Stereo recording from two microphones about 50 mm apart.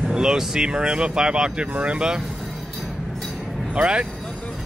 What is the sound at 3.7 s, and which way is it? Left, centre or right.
Speech, right.